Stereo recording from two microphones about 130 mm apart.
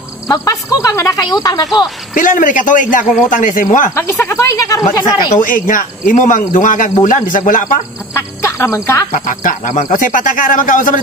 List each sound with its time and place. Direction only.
0.3 s speech: 25° left (ahead or behind)
2.1 s speech: 90° left
3.9 s speech: 20° left (ahead or behind)
5.0 s speech: 90° left
8.1 s speech: 20° left (ahead or behind)
9.1 s speech: 85° left